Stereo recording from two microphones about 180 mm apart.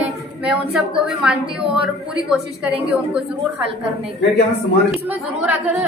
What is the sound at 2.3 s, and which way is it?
Speech, 5° right (ahead or behind).